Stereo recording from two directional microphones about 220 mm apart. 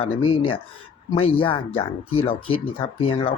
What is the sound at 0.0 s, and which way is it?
Speech, 25° left (ahead or behind).